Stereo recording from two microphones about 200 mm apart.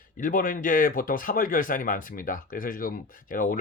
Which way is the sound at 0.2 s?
45° left (ahead or behind).